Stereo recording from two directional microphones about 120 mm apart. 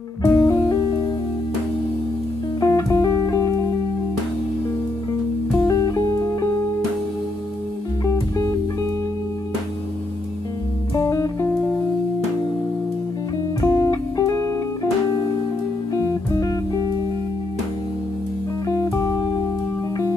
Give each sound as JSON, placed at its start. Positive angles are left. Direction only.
{"t": 0.2, "sound": "music", "side_deg": 25}
{"t": 0.7, "sound": "music", "side_deg": 35}
{"t": 2.6, "sound": "music", "side_deg": 30}
{"t": 5.6, "sound": "music", "side_deg": 30}
{"t": 8.0, "sound": "music", "side_deg": 30}
{"t": 11.0, "sound": "music", "side_deg": 30}
{"t": 13.6, "sound": "music", "side_deg": 30}
{"t": 15.9, "sound": "music", "side_deg": 25}
{"t": 18.7, "sound": "music", "side_deg": 30}